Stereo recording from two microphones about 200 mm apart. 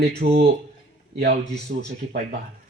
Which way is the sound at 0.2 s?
55° right (ahead or behind).